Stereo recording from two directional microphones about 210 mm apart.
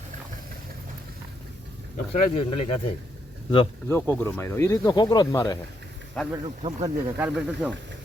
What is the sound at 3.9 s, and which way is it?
Speech, 10° left (ahead or behind).